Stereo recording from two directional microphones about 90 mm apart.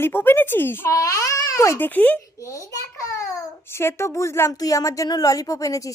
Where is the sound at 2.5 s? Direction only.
35° left (ahead or behind).